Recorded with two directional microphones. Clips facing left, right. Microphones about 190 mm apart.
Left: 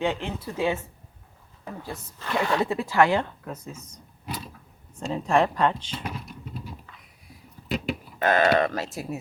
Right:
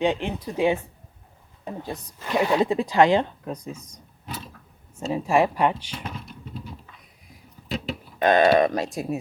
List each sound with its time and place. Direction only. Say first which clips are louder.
0.0 s speech: right 4 dB; 15° right (ahead or behind)
4.9 s speech: right 2 dB; 5° right (ahead or behind)
8.2 s speech: right 4 dB; 20° right (ahead or behind)